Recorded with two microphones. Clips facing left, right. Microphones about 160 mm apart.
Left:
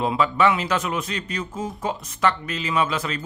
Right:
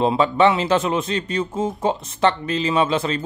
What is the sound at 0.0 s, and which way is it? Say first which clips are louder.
Speech: right 4 dB; 30° right (ahead or behind).